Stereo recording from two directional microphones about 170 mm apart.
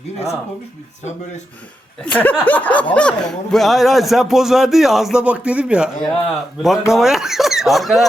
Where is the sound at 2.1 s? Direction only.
10° left (ahead or behind); by 5.9 s 5° right (ahead or behind).